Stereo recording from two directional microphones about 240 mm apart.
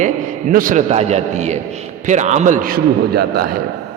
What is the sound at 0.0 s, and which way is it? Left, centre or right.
A man's voice, right.